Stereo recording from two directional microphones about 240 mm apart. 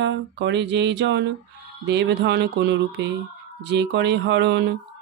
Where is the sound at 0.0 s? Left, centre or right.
Right.